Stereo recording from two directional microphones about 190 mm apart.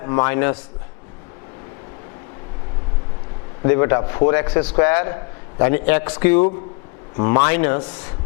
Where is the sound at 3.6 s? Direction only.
20° left (ahead or behind).